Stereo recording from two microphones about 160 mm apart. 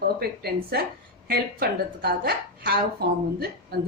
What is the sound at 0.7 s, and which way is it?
A woman's voice, 75° right (ahead or behind).